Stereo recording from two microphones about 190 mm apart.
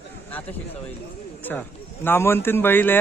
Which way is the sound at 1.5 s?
10° left (ahead or behind).